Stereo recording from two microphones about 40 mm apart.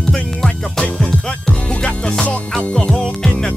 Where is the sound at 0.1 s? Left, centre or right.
Centre.